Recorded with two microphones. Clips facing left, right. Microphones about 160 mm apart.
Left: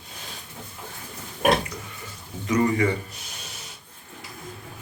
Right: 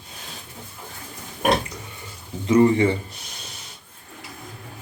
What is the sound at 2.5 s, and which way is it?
Speech, 30° right (ahead or behind).